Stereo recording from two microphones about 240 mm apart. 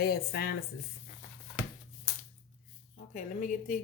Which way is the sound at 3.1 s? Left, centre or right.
Left.